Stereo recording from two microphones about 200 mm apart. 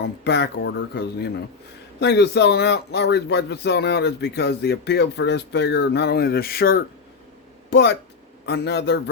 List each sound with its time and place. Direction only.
0.0 s speech: 60° left (ahead or behind)